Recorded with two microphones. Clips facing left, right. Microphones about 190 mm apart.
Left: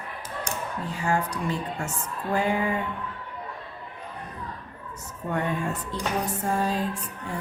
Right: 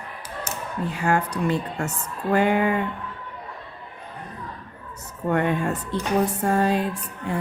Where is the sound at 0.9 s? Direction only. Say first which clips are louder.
Right 3 dB; 65° right (ahead or behind).